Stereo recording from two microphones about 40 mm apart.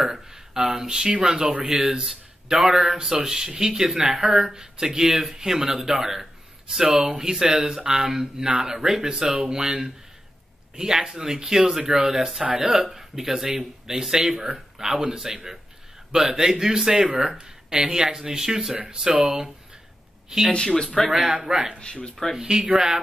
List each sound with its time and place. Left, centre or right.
0.0 s a man's voice: centre
8.7 s a man's voice: centre
20.5 s speech: centre
21.1 s a man's voice: centre
21.7 s speech: left
22.3 s a man's voice: centre